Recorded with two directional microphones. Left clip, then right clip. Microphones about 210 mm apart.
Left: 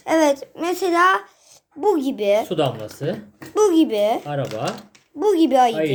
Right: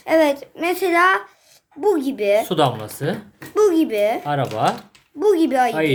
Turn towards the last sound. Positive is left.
turn(degrees=5)  # may be behind; listen again after turning